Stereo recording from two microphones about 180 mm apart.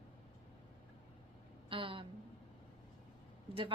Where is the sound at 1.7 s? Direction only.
30° right (ahead or behind).